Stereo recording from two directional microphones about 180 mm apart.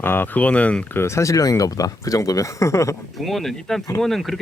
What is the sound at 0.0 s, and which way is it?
Speech, 10° left (ahead or behind).